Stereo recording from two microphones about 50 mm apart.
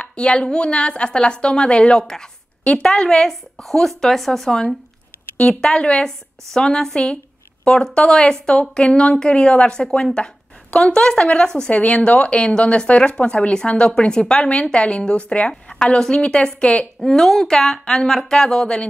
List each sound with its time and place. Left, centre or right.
0.0 s a woman's voice: left
3.3 s speech: centre
5.4 s a woman's voice: centre